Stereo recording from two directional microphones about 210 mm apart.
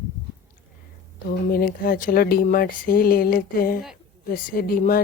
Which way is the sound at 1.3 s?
45° left (ahead or behind).